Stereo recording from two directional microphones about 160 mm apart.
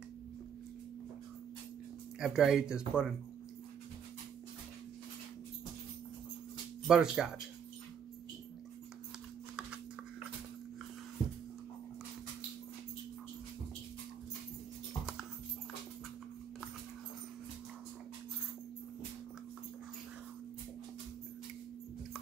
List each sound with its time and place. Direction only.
2.1 s speech: 5° right (ahead or behind)
6.9 s speech: 5° right (ahead or behind)